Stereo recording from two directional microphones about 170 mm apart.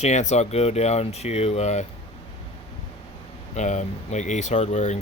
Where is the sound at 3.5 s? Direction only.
45° left (ahead or behind).